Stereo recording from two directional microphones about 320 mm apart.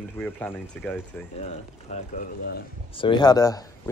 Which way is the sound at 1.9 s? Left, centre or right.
Left.